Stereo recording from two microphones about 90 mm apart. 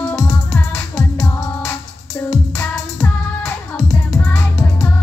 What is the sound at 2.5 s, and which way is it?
Music, 20° left (ahead or behind).